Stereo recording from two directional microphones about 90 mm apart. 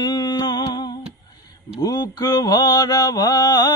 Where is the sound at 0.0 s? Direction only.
50° left (ahead or behind).